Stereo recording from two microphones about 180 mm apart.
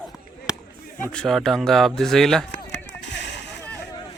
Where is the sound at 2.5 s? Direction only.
80° left.